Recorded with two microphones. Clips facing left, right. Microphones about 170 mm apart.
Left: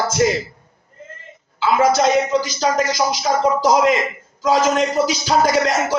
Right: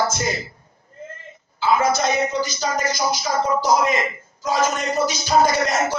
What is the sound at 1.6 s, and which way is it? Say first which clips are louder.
A man's voice: left 4 dB; 90° left.